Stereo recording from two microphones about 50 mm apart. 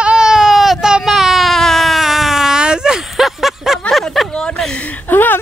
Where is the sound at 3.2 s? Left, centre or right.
Centre.